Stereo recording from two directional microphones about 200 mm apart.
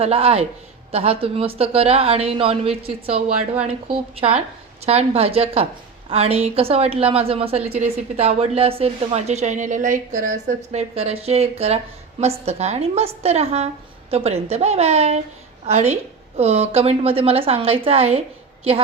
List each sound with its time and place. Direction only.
0.0 s a woman's voice: 30° right (ahead or behind)